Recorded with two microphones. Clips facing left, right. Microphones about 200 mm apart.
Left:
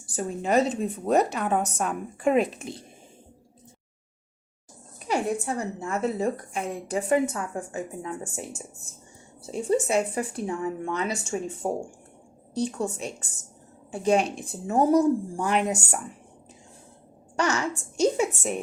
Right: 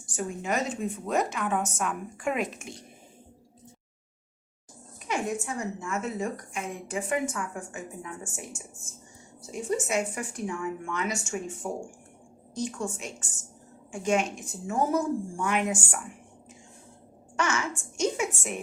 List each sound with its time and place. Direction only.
0.1 s a woman's voice: 35° left (ahead or behind)
5.0 s a woman's voice: 35° left (ahead or behind)
17.3 s a sound: 40° left (ahead or behind)